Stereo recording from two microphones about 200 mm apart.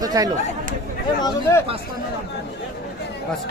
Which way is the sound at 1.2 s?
20° left (ahead or behind).